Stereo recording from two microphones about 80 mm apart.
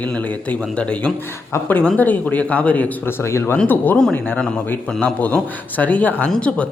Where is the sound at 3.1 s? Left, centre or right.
Left.